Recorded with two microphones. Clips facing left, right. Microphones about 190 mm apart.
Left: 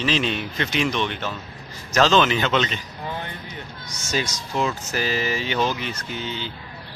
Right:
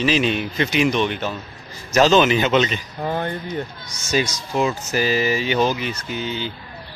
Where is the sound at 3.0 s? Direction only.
50° right (ahead or behind).